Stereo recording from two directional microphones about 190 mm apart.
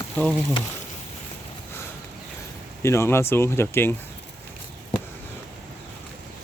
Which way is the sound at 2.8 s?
15° left (ahead or behind).